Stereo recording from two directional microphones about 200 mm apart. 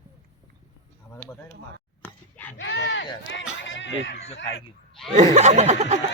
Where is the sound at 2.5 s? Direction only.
70° left (ahead or behind).